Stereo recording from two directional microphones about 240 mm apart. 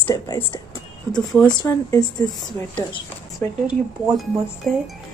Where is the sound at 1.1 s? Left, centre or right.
Centre.